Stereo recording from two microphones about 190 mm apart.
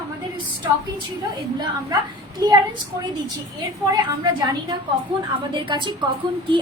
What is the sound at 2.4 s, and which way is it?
Speech, 20° right (ahead or behind).